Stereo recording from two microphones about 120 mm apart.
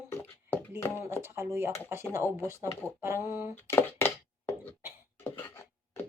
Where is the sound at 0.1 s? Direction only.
15° left (ahead or behind).